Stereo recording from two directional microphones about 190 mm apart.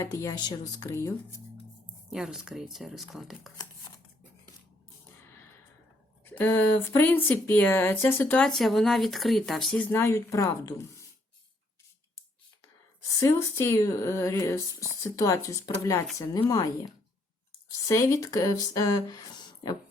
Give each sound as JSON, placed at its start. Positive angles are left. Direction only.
{"t": 0.2, "sound": "speech", "side_deg": 20}
{"t": 2.0, "sound": "speech", "side_deg": 0}
{"t": 3.6, "sound": "a sound", "side_deg": 20}
{"t": 6.2, "sound": "speech", "side_deg": 10}
{"t": 13.1, "sound": "speech", "side_deg": 15}